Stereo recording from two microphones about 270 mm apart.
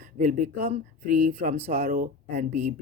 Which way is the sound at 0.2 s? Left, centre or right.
Right.